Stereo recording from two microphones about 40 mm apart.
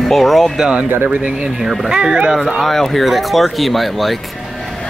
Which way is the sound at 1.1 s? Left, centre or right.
Right.